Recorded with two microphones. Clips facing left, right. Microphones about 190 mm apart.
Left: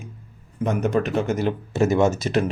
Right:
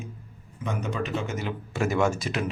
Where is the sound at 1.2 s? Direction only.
35° left (ahead or behind).